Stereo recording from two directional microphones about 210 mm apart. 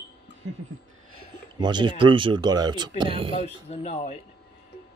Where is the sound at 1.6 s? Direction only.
20° right (ahead or behind).